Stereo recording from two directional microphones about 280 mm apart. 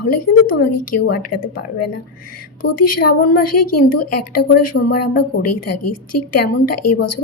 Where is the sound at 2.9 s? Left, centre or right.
Left.